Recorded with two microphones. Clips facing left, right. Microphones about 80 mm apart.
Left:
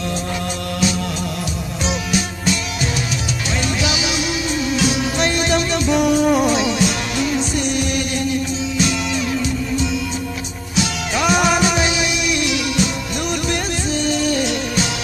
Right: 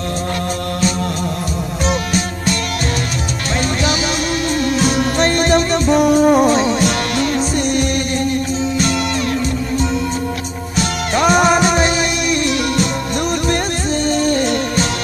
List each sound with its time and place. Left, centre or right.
5.2 s music: right
6.8 s music: centre
7.5 s music: right
10.8 s music: right
14.0 s music: right